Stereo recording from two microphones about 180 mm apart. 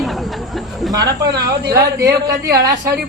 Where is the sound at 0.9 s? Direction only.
20° right (ahead or behind).